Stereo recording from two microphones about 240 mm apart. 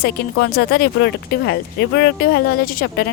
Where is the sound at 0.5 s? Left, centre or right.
Left.